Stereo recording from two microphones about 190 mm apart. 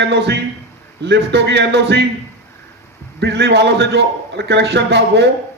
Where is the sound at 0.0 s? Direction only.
65° right (ahead or behind).